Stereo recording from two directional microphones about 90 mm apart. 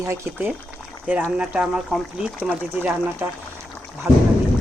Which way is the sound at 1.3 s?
15° right (ahead or behind).